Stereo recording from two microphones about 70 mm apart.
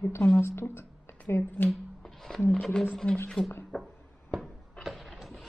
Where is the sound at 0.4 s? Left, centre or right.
Left.